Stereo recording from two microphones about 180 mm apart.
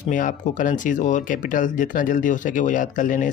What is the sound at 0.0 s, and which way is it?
Speech, 45° left (ahead or behind).